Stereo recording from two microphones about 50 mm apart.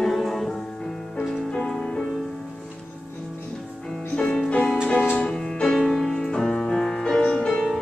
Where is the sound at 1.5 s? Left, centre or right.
Centre.